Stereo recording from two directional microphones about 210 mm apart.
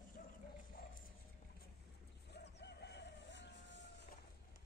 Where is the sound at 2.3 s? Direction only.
50° left (ahead or behind).